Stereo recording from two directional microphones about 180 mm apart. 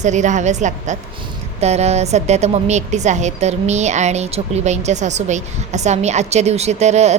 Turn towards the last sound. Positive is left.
turn(degrees=-40)  # may be behind; listen again after turning